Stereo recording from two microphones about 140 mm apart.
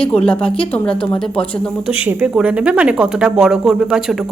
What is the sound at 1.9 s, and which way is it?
Speech, 10° right (ahead or behind).